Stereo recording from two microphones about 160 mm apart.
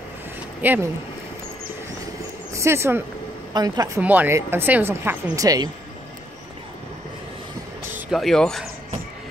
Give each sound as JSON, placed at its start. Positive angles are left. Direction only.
{"t": 0.6, "sound": "speech", "side_deg": -10}
{"t": 2.5, "sound": "speech", "side_deg": -15}
{"t": 4.0, "sound": "speech", "side_deg": -10}
{"t": 8.1, "sound": "speech", "side_deg": 0}